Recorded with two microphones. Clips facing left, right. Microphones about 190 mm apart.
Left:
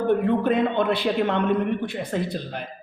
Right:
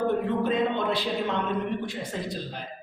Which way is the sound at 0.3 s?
60° left (ahead or behind).